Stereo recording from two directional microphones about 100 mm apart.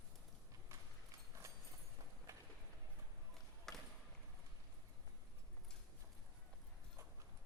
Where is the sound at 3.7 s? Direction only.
5° left (ahead or behind).